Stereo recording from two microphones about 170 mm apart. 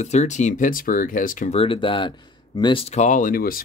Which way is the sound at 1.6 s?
30° left (ahead or behind).